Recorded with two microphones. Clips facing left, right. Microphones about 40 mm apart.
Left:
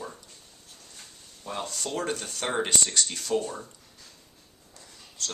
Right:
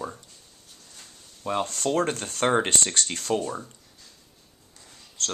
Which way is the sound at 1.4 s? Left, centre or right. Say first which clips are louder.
Right 7 dB; right.